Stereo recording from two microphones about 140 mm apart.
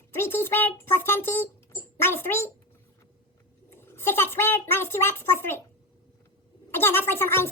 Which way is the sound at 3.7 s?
15° left (ahead or behind).